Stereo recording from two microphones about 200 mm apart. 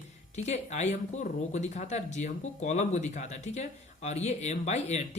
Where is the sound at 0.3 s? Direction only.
35° left (ahead or behind).